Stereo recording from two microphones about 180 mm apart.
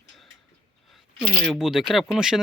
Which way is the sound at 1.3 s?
Centre (ahead or behind).